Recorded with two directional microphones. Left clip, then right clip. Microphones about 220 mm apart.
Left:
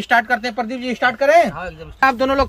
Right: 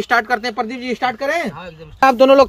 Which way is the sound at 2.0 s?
35° right (ahead or behind).